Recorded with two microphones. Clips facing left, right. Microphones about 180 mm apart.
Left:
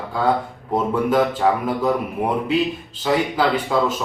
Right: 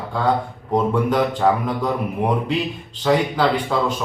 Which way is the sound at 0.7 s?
5° left (ahead or behind).